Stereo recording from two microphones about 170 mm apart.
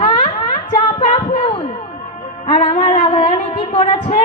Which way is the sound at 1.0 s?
35° left (ahead or behind).